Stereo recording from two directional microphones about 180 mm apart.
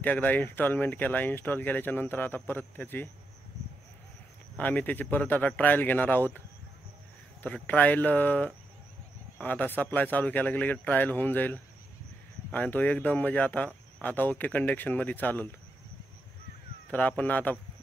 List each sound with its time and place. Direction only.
0.0 s speech: 10° left (ahead or behind)
4.6 s speech: 10° left (ahead or behind)
7.4 s speech: 5° left (ahead or behind)
17.2 s speech: 10° left (ahead or behind)